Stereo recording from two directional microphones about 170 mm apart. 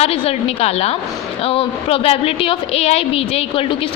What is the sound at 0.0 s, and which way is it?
A woman's voice, 35° left (ahead or behind).